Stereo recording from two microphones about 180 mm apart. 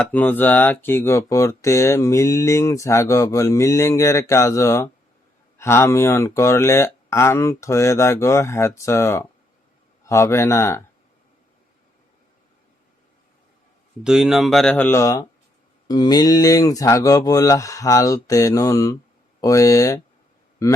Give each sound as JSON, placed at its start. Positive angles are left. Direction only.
{"t": 0.0, "sound": "speech", "side_deg": 10}
{"t": 14.0, "sound": "speech", "side_deg": -5}